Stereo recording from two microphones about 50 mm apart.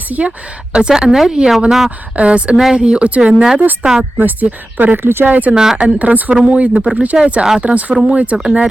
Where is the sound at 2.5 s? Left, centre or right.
Centre.